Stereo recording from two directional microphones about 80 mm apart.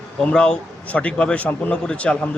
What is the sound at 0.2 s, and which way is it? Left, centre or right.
A man's voice, centre.